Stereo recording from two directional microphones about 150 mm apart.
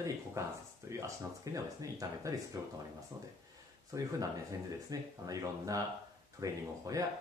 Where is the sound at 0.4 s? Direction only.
20° right (ahead or behind).